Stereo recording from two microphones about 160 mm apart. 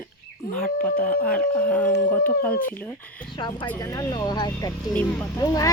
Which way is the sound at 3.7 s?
20° left (ahead or behind).